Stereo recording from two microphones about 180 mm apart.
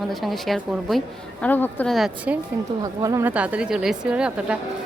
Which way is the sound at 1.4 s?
10° left (ahead or behind).